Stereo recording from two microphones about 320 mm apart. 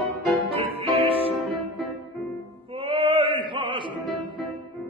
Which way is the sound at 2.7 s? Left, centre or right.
Centre.